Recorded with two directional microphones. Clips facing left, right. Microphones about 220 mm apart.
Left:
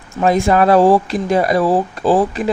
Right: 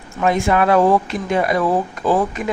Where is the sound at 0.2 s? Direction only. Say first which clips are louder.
Left 3 dB; 35° left (ahead or behind).